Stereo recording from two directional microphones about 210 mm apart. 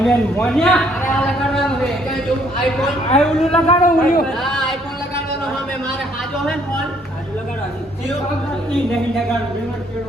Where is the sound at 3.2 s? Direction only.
Centre (ahead or behind).